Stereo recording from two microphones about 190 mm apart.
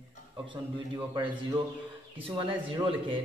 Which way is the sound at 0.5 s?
25° right (ahead or behind).